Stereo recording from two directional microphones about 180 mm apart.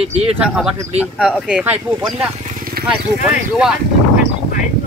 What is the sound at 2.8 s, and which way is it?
Clip-clop, 55° right (ahead or behind).